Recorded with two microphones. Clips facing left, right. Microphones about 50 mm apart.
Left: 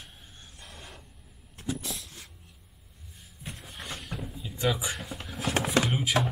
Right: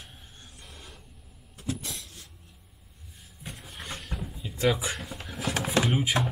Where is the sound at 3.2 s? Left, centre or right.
Centre.